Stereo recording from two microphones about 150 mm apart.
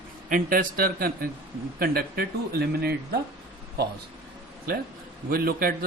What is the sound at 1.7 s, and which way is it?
A man's voice, 90° right.